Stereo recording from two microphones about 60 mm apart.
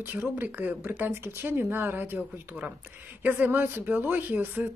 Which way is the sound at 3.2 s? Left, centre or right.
Right.